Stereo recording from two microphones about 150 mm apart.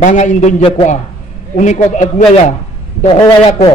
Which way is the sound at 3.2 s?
30° left (ahead or behind).